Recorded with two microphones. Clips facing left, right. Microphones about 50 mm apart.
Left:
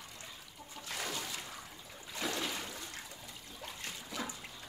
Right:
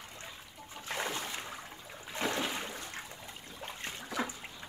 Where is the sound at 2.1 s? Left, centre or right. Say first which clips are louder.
Right 4 dB; right.